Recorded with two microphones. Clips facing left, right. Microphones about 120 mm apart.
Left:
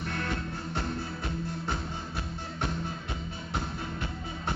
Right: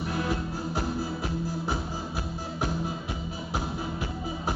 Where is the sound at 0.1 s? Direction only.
5° right (ahead or behind).